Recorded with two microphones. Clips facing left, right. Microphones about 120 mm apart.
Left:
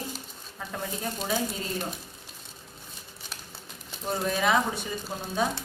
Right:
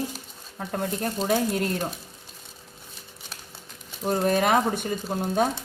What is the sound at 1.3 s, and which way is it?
Speech, 65° right (ahead or behind).